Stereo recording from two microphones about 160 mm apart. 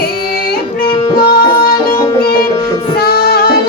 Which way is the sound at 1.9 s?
70° left (ahead or behind).